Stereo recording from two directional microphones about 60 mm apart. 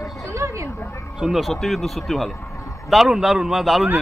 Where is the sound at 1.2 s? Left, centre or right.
Centre.